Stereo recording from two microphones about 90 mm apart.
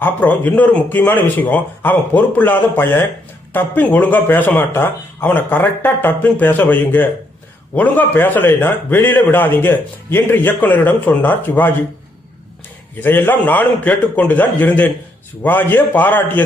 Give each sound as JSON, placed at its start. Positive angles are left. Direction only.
{"t": 0.0, "sound": "a man's voice", "side_deg": 20}
{"t": 13.0, "sound": "a man's voice", "side_deg": 20}